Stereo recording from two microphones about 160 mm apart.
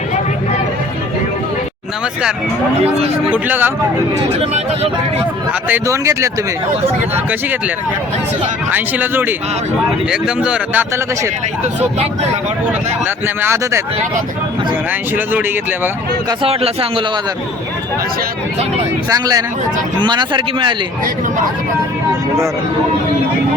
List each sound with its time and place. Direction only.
3.2 s speech: 10° right (ahead or behind)
4.4 s a man's voice: 40° right (ahead or behind)
5.6 s speech: 15° right (ahead or behind)
8.7 s speech: 10° right (ahead or behind)
13.2 s speech: 15° right (ahead or behind)
15.1 s speech: 10° right (ahead or behind)
16.4 s a man's voice: 35° right (ahead or behind)
19.1 s speech: 25° right (ahead or behind)